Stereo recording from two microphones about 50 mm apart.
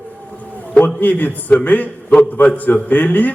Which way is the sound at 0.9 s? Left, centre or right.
Left.